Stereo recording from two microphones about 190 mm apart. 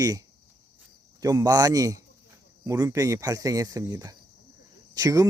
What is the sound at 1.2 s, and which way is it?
Speech, 20° right (ahead or behind).